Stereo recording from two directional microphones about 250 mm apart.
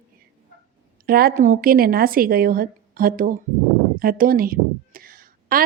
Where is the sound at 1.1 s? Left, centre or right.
Right.